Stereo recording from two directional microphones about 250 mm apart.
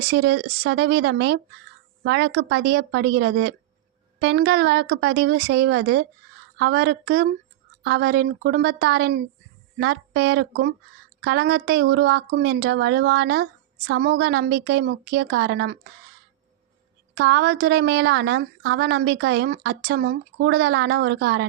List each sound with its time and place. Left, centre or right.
0.1 s a woman's voice: right
17.2 s speech: right